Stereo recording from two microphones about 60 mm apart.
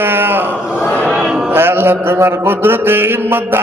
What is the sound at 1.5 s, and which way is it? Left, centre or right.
Mantra, right.